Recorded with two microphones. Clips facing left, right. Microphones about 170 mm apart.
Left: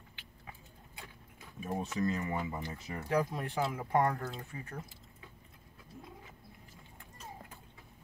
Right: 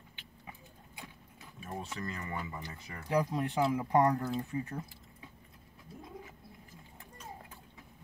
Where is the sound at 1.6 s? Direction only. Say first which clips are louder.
Left 6 dB; 20° left (ahead or behind).